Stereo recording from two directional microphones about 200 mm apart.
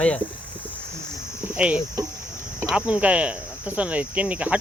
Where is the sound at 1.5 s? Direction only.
5° right (ahead or behind).